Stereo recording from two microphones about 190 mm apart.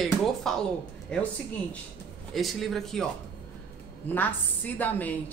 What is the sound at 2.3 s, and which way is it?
A man's voice, centre (ahead or behind).